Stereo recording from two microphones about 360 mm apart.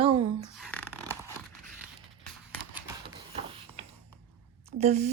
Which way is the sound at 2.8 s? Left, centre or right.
Centre.